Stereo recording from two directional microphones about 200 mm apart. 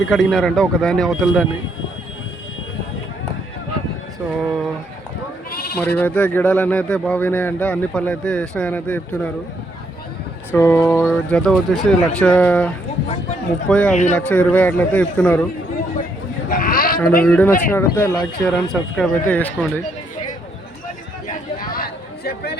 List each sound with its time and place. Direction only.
0.1 s speech: centre (ahead or behind)
5.5 s sheep: 50° left (ahead or behind)
6.0 s speech: 5° left (ahead or behind)
10.5 s speech: 10° left (ahead or behind)
13.9 s speech: 35° left (ahead or behind)
14.2 s speech: 5° left (ahead or behind)
16.5 s sheep: 45° left (ahead or behind)
17.2 s speech: 10° left (ahead or behind)
21.2 s chatter: 45° left (ahead or behind)